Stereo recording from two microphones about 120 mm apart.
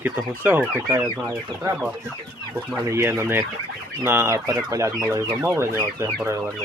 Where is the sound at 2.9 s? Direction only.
20° right (ahead or behind).